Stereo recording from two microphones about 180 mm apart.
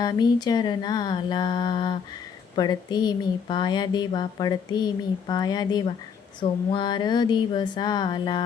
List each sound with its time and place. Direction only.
0.0 s speech: 20° left (ahead or behind)